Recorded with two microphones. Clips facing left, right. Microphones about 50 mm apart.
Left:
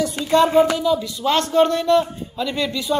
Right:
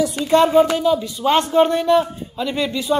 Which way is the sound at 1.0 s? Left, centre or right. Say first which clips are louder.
Right 2 dB; right.